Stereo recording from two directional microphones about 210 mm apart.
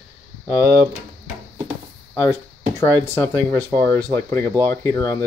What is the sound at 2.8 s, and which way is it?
Speech, 10° left (ahead or behind).